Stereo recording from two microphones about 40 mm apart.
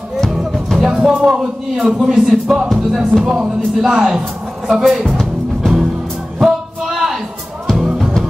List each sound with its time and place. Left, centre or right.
0.8 s speech: centre
2.7 s music: centre
3.9 s speech: centre
5.0 s music: centre
6.4 s music: centre